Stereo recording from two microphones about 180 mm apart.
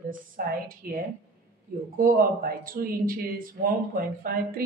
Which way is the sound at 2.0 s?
55° right (ahead or behind).